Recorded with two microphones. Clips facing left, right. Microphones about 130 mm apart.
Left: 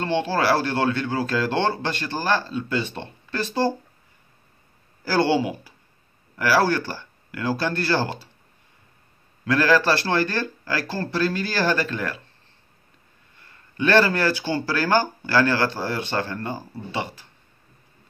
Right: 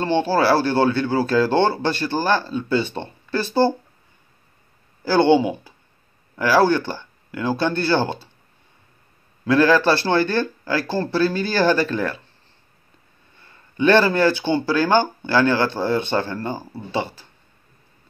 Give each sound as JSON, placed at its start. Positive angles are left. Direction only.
{"t": 0.0, "sound": "speech", "side_deg": -30}
{"t": 5.0, "sound": "speech", "side_deg": -25}
{"t": 9.5, "sound": "speech", "side_deg": -25}
{"t": 13.5, "sound": "speech", "side_deg": -25}